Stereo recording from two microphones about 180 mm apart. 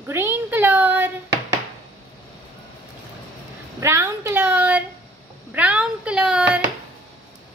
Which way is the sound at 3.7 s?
15° right (ahead or behind).